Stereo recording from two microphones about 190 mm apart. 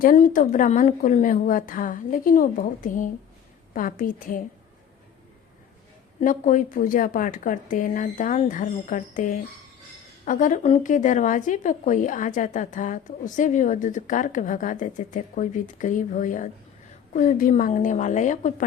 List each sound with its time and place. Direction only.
0.0 s speech: 45° left (ahead or behind)
6.1 s speech: 45° left (ahead or behind)